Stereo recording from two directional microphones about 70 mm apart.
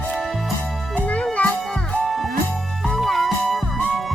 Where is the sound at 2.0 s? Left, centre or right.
Centre.